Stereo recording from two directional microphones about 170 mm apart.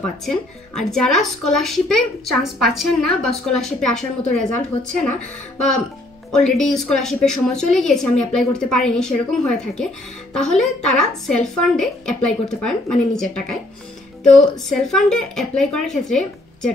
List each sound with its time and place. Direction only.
0.2 s a woman's voice: 5° left (ahead or behind)
6.3 s a woman's voice: 5° left (ahead or behind)